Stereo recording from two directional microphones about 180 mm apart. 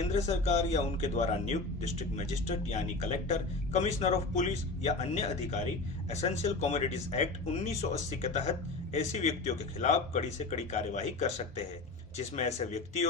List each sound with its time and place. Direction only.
0.1 s a man's voice: 40° left (ahead or behind)